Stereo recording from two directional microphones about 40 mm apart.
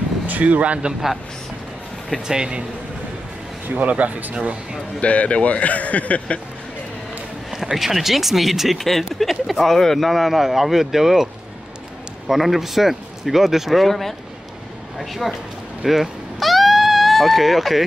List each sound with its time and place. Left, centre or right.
0.3 s speech: right
2.1 s speech: centre
3.6 s speech: right
5.0 s a man's voice: left
7.7 s speech: centre
12.3 s speech: centre
15.8 s a sound: centre